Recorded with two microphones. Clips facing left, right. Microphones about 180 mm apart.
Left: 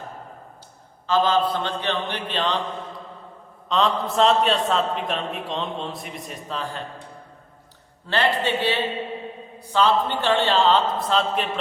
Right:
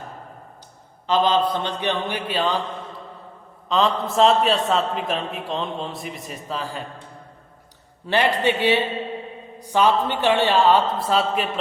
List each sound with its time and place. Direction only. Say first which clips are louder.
1.0 s a man's voice: right 1 dB; 20° right (ahead or behind)
3.7 s a man's voice: right 1 dB; centre (ahead or behind)
8.0 s a man's voice: right 3 dB; 15° right (ahead or behind)